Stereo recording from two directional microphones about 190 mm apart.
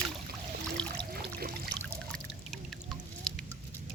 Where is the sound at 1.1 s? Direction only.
55° right (ahead or behind).